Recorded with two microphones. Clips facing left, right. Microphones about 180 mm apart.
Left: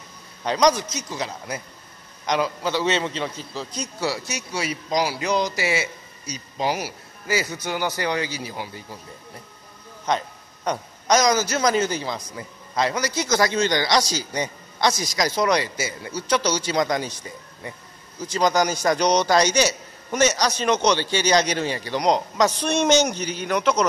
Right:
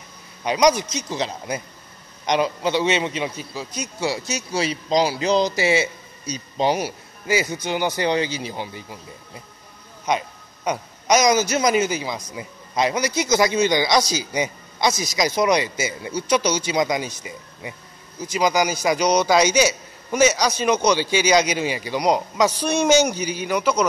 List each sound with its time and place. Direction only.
0.4 s a man's voice: 10° right (ahead or behind)
4.1 s a man's voice: 20° right (ahead or behind)
10.0 s a man's voice: 10° right (ahead or behind)